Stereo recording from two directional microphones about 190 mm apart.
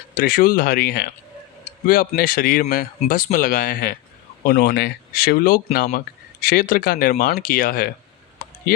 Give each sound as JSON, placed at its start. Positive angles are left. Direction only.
{"t": 0.2, "sound": "speech", "side_deg": 50}